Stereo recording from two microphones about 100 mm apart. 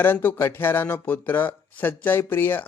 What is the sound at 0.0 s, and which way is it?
Speech, 20° left (ahead or behind).